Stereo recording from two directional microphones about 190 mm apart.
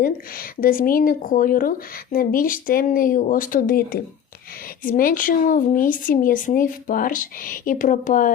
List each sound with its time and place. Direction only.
0.0 s speech: 50° left (ahead or behind)